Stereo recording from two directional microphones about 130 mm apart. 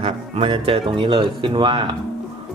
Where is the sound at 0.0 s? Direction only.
45° right (ahead or behind).